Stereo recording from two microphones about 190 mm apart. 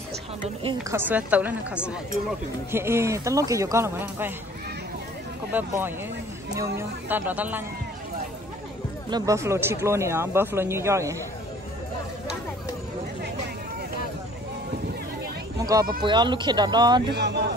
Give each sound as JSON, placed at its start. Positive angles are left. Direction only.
{"t": 0.7, "sound": "speech", "side_deg": -15}
{"t": 2.7, "sound": "speech", "side_deg": -15}
{"t": 5.5, "sound": "speech", "side_deg": -10}
{"t": 9.1, "sound": "speech", "side_deg": -15}
{"t": 15.6, "sound": "speech", "side_deg": -20}
{"t": 17.1, "sound": "speech", "side_deg": -60}